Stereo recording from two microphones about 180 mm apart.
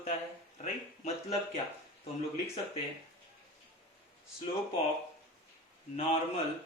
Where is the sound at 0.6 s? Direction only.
35° left (ahead or behind).